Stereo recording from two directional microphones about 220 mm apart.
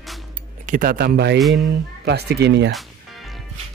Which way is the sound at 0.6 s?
35° right (ahead or behind).